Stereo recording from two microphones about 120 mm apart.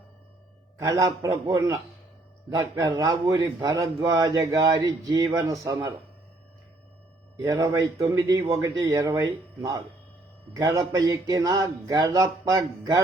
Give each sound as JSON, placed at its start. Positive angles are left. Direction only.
{"t": 0.8, "sound": "a man's voice", "side_deg": -25}
{"t": 7.3, "sound": "a man's voice", "side_deg": -30}